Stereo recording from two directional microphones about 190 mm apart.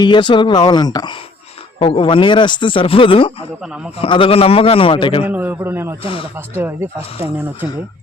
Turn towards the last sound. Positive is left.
turn(degrees=-10)  # may be behind; listen again after turning